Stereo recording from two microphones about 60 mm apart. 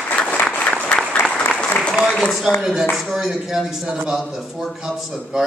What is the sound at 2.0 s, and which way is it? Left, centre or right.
A man's voice, centre.